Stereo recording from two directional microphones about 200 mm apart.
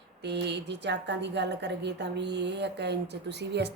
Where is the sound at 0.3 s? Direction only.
60° right (ahead or behind).